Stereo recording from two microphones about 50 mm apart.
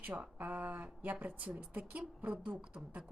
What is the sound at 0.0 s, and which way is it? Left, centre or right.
A woman's voice, right.